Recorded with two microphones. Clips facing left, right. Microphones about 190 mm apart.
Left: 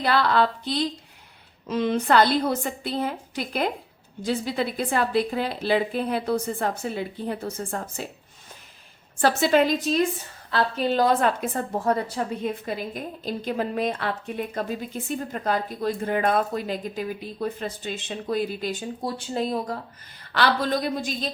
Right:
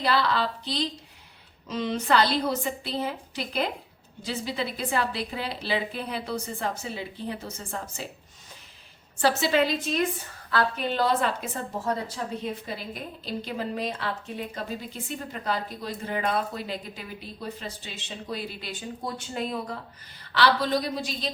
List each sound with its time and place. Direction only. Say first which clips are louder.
0.0 s a woman's voice: left 4 dB; 55° left (ahead or behind)
9.2 s a woman's voice: left 3 dB; 50° left (ahead or behind)
12.6 s a woman's voice: left 5 dB; 50° left (ahead or behind)
19.0 s a woman's voice: left 5 dB; 35° left (ahead or behind); by 21.2 s 50° left (ahead or behind)